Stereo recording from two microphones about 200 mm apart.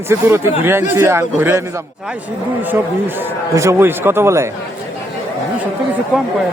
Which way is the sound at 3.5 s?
15° right (ahead or behind).